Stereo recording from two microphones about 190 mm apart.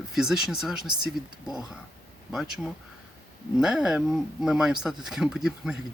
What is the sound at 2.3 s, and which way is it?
Speech, centre (ahead or behind).